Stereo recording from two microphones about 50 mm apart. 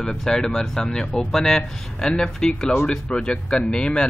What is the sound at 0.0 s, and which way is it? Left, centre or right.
Speech, centre.